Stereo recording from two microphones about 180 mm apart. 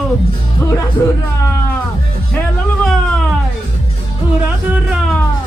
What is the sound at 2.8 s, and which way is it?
Music, centre (ahead or behind).